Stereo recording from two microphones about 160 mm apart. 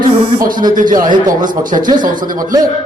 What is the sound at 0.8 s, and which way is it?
A man's voice, 55° right (ahead or behind).